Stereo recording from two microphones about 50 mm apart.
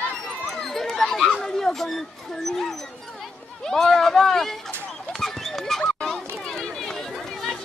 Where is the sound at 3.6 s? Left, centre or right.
Centre.